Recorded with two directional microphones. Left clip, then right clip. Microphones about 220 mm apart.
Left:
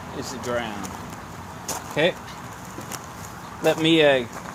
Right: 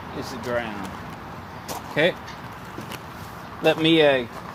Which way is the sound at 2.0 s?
Centre (ahead or behind).